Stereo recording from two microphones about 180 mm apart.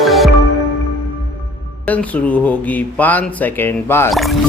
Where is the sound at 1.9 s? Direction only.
10° left (ahead or behind).